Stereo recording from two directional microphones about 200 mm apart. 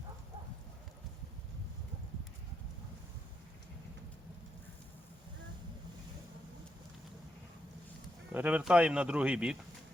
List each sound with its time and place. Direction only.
8.3 s speech: 10° right (ahead or behind)